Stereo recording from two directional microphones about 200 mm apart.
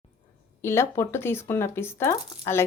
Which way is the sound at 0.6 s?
15° left (ahead or behind).